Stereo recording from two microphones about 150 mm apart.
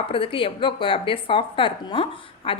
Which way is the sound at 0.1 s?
35° left (ahead or behind).